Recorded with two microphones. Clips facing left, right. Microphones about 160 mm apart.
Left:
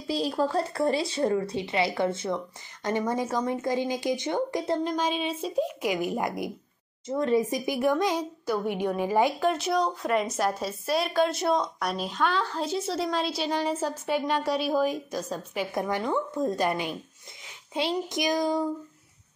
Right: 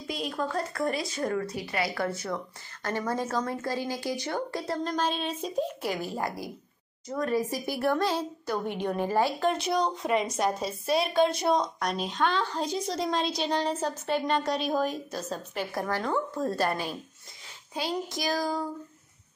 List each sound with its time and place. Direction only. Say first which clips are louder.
0.1 s a woman's voice: left 5 dB; 30° left (ahead or behind); by 9.5 s 10° left (ahead or behind)
9.5 s a woman's voice: left 1 dB; centre (ahead or behind); by 18.7 s 20° left (ahead or behind)